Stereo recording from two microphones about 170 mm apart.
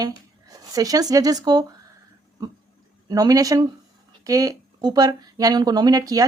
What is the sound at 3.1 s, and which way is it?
Speech, 20° right (ahead or behind).